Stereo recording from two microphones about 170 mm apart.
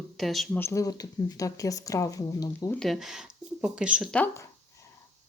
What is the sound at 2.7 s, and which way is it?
Speech, centre (ahead or behind).